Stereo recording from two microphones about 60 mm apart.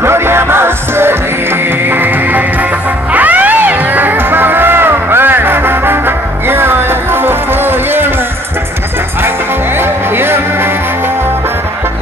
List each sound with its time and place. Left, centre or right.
0.0 s music: right
9.8 s music: right